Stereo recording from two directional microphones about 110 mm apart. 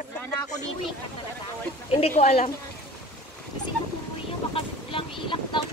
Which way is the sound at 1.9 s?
65° left (ahead or behind).